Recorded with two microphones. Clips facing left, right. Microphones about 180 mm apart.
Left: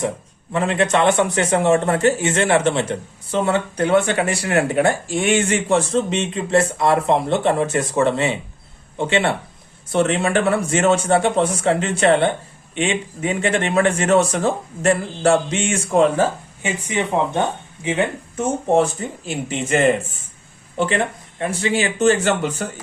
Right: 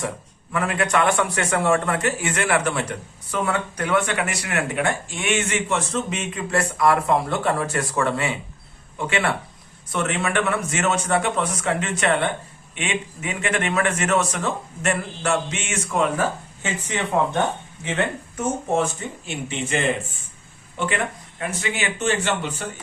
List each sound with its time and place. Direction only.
0.5 s a man's voice: 25° left (ahead or behind)
16.6 s speech: 15° left (ahead or behind)
18.3 s a man's voice: 35° left (ahead or behind)
20.7 s a man's voice: 30° left (ahead or behind)